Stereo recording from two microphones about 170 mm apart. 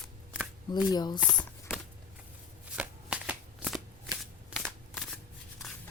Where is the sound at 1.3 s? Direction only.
5° left (ahead or behind).